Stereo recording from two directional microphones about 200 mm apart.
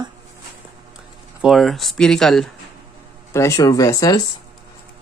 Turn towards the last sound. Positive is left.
turn(degrees=15)  # may be behind; listen again after turning